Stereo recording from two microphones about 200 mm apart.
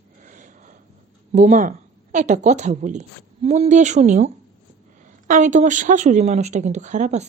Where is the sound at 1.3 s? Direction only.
35° right (ahead or behind).